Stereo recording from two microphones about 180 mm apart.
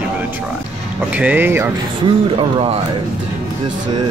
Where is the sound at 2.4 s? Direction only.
30° right (ahead or behind).